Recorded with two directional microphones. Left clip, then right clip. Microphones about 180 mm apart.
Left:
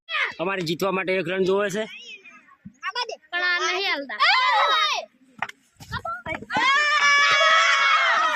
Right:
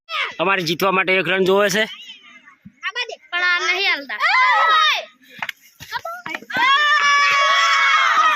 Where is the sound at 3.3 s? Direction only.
15° left (ahead or behind).